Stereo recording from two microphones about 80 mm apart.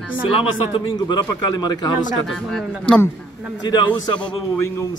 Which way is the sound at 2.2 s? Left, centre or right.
Centre.